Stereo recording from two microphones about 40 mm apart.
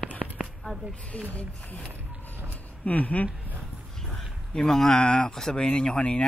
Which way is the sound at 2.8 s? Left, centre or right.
Left.